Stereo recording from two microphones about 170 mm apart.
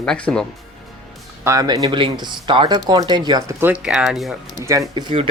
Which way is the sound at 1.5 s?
20° right (ahead or behind).